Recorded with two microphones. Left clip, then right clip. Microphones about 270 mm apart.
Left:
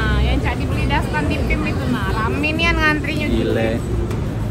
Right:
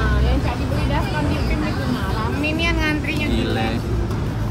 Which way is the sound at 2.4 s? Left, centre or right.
Centre.